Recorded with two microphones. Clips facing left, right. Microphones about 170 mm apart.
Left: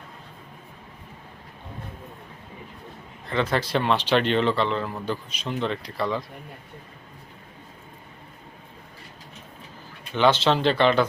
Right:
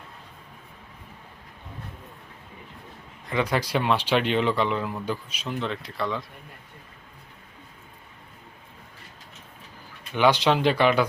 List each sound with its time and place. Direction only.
3.2 s speech: 10° right (ahead or behind)
10.2 s speech: 15° right (ahead or behind)